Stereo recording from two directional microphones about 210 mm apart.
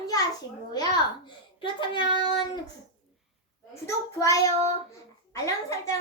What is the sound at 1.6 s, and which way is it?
Speech, 25° left (ahead or behind).